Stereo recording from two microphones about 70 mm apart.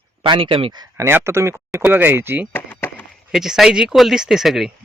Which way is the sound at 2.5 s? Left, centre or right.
Left.